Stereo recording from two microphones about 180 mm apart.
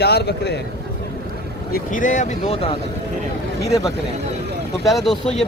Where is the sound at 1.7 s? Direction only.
45° left (ahead or behind).